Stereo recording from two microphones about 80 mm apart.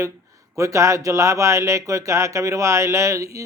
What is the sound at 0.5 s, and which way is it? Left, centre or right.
A man's voice, right.